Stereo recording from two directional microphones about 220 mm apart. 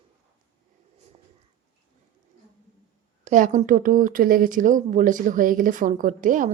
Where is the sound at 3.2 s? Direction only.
35° right (ahead or behind).